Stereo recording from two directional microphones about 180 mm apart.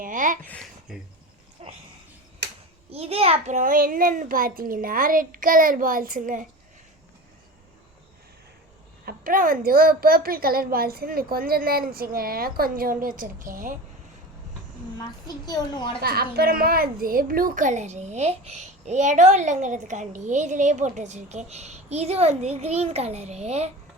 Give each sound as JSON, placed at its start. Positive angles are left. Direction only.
{"t": 0.0, "sound": "speech", "side_deg": -45}
{"t": 0.4, "sound": "speech", "side_deg": 5}
{"t": 1.6, "sound": "a sound", "side_deg": -35}
{"t": 2.9, "sound": "a child's voice", "side_deg": -35}
{"t": 9.0, "sound": "a woman's voice", "side_deg": -50}
{"t": 15.4, "sound": "a woman's voice", "side_deg": 25}
{"t": 16.0, "sound": "a child's voice", "side_deg": -60}